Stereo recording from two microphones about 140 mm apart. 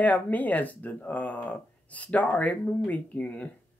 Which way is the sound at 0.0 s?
10° left (ahead or behind).